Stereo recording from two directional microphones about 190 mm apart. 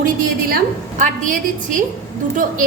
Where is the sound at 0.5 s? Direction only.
40° right (ahead or behind).